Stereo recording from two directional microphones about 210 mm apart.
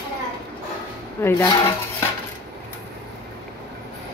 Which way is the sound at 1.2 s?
10° left (ahead or behind).